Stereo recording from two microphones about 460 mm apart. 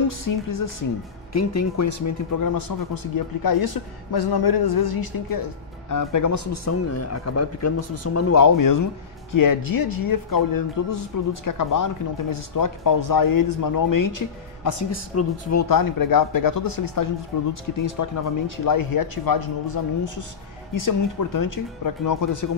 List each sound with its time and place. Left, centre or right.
0.2 s speech: left
15.7 s speech: left